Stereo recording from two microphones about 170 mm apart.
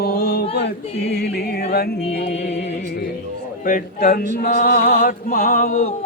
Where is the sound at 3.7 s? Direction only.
55° left (ahead or behind).